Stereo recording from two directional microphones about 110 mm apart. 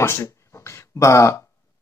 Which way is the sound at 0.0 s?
25° left (ahead or behind).